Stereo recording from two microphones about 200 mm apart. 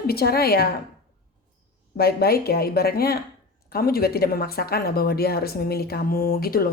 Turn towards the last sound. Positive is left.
turn(degrees=50)  # may be behind; listen again after turning